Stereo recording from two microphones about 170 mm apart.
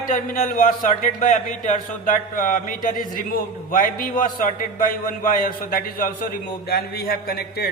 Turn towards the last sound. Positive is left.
turn(degrees=65)  # may be behind; listen again after turning